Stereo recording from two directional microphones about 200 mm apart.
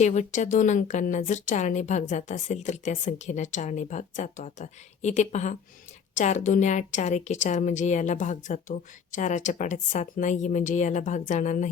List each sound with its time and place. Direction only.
0.0 s a woman's voice: 35° left (ahead or behind)